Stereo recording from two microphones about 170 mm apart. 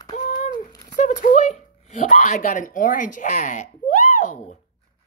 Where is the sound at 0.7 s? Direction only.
20° left (ahead or behind).